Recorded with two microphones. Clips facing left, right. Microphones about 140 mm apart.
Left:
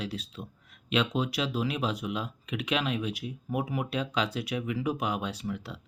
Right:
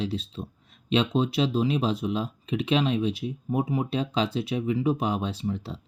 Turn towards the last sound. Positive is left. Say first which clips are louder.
# right 4 dB
turn(degrees=-30)  # may be behind; listen again after turning